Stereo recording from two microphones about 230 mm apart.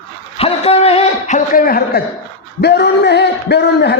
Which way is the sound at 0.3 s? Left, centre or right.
Left.